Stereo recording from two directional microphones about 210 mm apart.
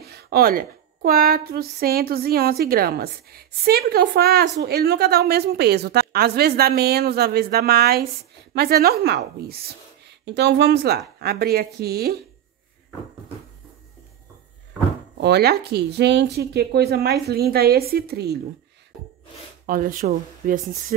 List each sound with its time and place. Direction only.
0.0 s a woman's voice: 50° right (ahead or behind)
15.1 s a woman's voice: 50° right (ahead or behind)
19.6 s speech: 40° right (ahead or behind)